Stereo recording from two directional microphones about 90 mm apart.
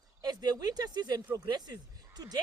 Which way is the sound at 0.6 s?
50° right (ahead or behind).